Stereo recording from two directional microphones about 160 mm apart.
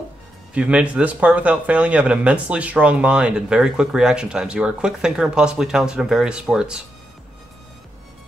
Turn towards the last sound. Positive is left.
turn(degrees=-5)  # may be behind; listen again after turning